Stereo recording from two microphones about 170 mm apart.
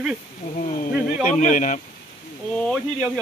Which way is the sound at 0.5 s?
50° left (ahead or behind).